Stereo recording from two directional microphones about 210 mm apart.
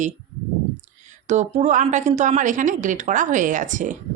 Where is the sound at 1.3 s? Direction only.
35° right (ahead or behind).